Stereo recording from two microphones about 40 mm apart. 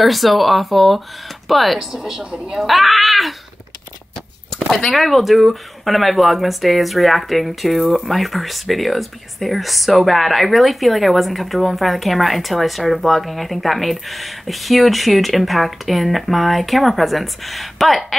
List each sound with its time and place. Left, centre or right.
0.0 s a woman's voice: centre
2.3 s speech: right
2.6 s speech: centre
4.6 s a sound: centre
4.8 s speech: centre